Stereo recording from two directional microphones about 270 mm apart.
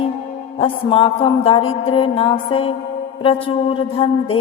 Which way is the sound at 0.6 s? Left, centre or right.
Centre.